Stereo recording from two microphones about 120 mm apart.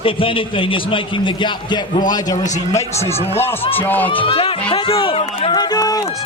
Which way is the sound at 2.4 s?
85° left.